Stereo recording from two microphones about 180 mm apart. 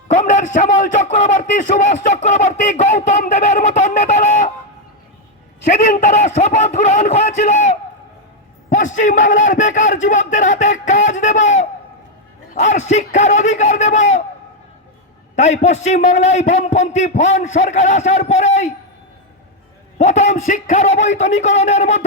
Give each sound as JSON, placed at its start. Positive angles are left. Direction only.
{"t": 0.1, "sound": "a man's voice", "side_deg": 40}
{"t": 5.6, "sound": "a man's voice", "side_deg": 45}
{"t": 15.4, "sound": "a man's voice", "side_deg": 40}
{"t": 20.0, "sound": "a man's voice", "side_deg": 40}